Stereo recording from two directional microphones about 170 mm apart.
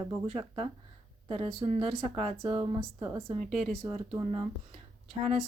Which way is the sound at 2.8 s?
20° right (ahead or behind).